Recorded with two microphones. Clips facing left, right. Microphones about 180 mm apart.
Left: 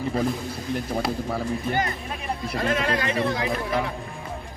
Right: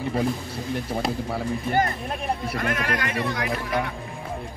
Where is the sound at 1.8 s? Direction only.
50° right (ahead or behind).